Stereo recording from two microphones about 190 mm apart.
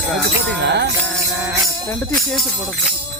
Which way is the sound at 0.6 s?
60° right (ahead or behind).